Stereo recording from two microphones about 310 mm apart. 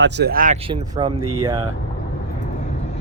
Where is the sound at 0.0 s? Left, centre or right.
Right; by 1.6 s centre.